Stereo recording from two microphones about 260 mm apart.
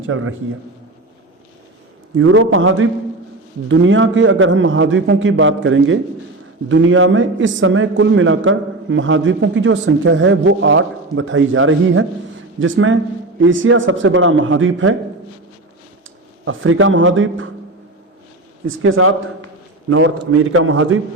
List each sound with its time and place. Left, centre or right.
0.1 s a man's voice: right
2.1 s a man's voice: right
16.5 s a man's voice: right
18.6 s a man's voice: right